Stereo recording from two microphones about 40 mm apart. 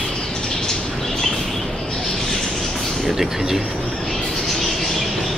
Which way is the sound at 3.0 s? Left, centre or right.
Centre.